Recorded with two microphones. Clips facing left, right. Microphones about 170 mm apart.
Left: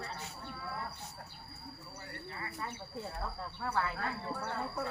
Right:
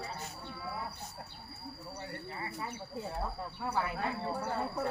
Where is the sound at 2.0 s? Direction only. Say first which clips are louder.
Right 3 dB; 25° right (ahead or behind).